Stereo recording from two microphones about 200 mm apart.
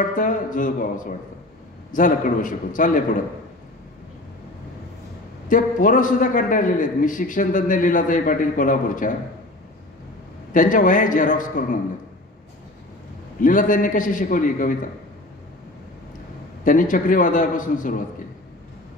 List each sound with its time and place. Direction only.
0.0 s a man's voice: 40° left (ahead or behind)
5.5 s a man's voice: 40° left (ahead or behind)
10.5 s a man's voice: 40° left (ahead or behind)
13.4 s a man's voice: 40° left (ahead or behind)
16.6 s a man's voice: 40° left (ahead or behind)